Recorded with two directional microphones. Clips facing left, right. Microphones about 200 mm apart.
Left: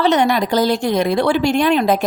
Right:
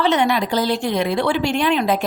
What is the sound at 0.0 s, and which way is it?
A woman's voice, 40° left (ahead or behind).